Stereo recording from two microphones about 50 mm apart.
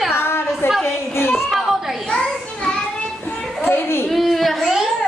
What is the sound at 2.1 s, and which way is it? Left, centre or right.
Children playing, centre.